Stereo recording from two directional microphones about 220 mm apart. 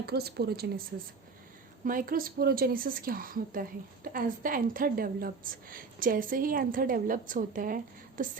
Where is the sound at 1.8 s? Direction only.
40° right (ahead or behind).